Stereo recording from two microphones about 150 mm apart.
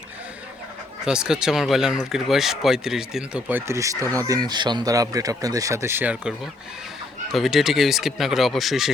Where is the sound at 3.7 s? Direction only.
20° right (ahead or behind).